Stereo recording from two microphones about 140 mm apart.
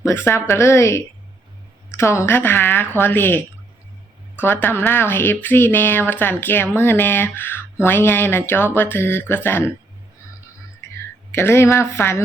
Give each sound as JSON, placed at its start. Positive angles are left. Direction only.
{"t": 0.0, "sound": "a woman's voice", "side_deg": 15}
{"t": 11.3, "sound": "speech", "side_deg": 20}